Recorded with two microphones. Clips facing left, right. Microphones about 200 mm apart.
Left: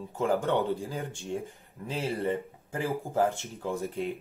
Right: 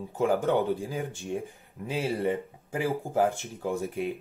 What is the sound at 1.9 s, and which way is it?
Speech, 15° right (ahead or behind).